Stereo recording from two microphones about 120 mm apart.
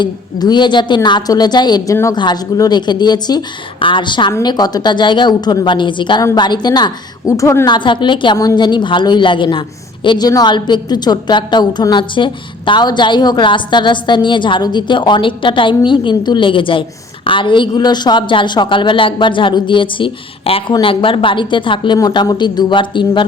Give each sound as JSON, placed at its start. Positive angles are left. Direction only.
{"t": 0.0, "sound": "a woman's voice", "side_deg": 35}
{"t": 7.7, "sound": "a woman's voice", "side_deg": 40}